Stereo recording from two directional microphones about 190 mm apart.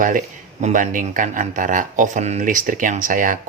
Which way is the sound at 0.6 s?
45° right (ahead or behind).